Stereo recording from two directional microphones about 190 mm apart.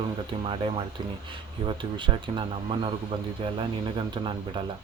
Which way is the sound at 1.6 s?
25° right (ahead or behind).